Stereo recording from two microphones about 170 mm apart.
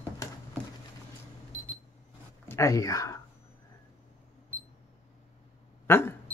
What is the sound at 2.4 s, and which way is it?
Speech, 15° left (ahead or behind).